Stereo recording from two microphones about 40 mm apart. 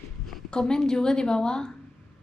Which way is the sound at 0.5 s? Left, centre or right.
Centre.